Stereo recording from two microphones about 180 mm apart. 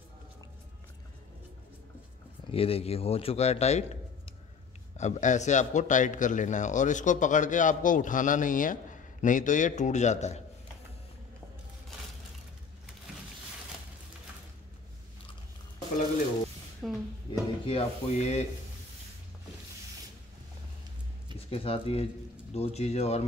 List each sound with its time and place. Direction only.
2.5 s a man's voice: 30° left (ahead or behind)
16.8 s music: centre (ahead or behind)
17.3 s drawer open or close: 35° left (ahead or behind)
21.5 s a man's voice: 30° left (ahead or behind)